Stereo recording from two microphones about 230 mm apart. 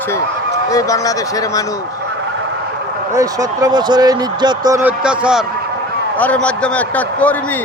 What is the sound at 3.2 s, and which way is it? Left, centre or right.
A man's voice, centre.